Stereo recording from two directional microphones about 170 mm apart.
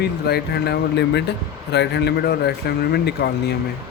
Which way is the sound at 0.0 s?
70° left (ahead or behind).